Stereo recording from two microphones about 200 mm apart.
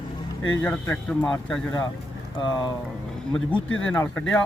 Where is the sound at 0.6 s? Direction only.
5° left (ahead or behind).